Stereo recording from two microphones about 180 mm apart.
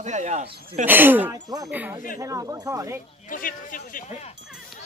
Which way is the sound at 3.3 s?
50° left (ahead or behind).